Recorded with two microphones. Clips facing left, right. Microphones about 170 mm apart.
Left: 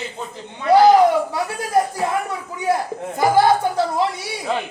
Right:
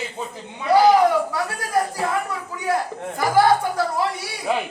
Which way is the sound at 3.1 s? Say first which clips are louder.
Left 2 dB; 25° left (ahead or behind).